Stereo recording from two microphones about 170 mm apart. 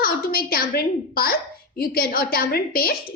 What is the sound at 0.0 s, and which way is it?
A woman's voice, 60° left (ahead or behind).